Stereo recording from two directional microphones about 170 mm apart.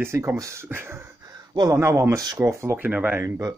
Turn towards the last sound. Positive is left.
turn(degrees=-15)  # may be behind; listen again after turning